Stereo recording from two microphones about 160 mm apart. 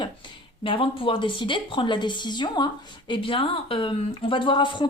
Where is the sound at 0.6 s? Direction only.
35° left (ahead or behind).